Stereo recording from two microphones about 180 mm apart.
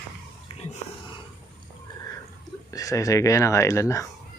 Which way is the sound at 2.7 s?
20° left (ahead or behind).